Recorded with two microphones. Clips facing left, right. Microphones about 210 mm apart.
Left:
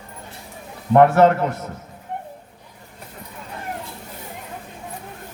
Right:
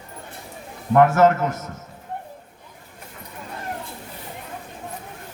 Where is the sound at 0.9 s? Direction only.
35° left (ahead or behind).